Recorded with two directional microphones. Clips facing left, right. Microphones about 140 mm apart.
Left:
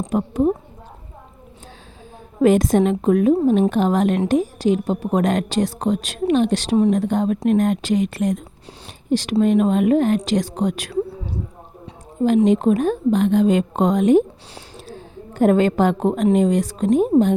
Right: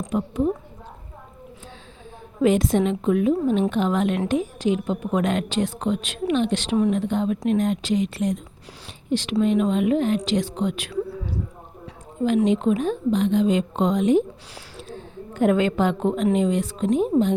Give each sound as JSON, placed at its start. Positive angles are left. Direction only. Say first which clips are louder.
{"t": 0.1, "sound": "a woman's voice", "louder": "left 4 dB", "side_deg": 45}
{"t": 2.4, "sound": "a woman's voice", "louder": "left 4 dB", "side_deg": 45}
{"t": 12.5, "sound": "a woman's voice", "louder": "left 4 dB", "side_deg": 45}
{"t": 14.8, "sound": "a woman's voice", "louder": "right 1 dB", "side_deg": 35}